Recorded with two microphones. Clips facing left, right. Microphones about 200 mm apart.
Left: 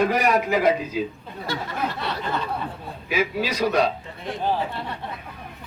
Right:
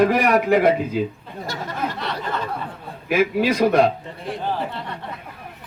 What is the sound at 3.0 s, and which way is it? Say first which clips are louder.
Speech: right 6 dB; 55° right (ahead or behind).